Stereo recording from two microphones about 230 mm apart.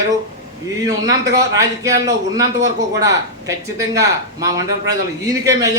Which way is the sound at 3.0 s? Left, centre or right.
Centre.